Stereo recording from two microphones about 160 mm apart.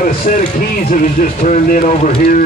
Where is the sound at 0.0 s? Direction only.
55° left (ahead or behind).